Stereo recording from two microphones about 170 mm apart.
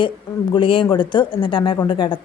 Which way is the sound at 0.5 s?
30° left (ahead or behind).